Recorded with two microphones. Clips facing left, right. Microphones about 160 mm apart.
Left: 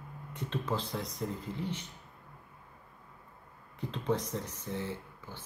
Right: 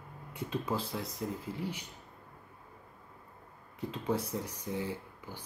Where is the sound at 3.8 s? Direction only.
5° right (ahead or behind).